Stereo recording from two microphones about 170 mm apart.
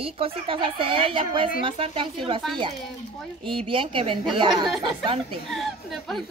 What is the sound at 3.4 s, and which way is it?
A woman's voice, 30° right (ahead or behind).